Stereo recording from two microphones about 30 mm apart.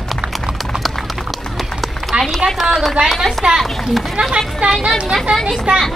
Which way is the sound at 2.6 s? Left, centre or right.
Centre.